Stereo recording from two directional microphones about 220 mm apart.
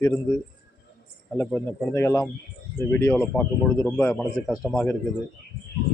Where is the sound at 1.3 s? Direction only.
10° left (ahead or behind).